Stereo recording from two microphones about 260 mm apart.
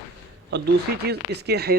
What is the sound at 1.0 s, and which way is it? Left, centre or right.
Speech, right.